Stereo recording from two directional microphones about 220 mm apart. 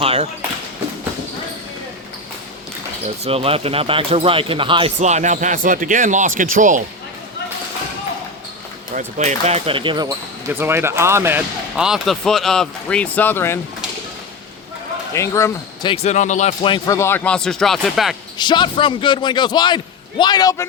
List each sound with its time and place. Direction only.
0.0 s a sound: 25° right (ahead or behind)
3.2 s speech: 25° right (ahead or behind)
9.0 s speech: 30° right (ahead or behind); by 13.6 s 10° left (ahead or behind)
15.1 s a man's voice: 15° left (ahead or behind); by 16.7 s 35° left (ahead or behind)
16.7 s speech: 15° left (ahead or behind); by 18.2 s centre (ahead or behind)
18.3 s a man's voice: 20° left (ahead or behind)